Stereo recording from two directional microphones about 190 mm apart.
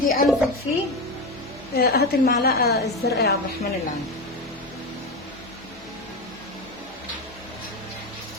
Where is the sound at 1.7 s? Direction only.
55° left (ahead or behind).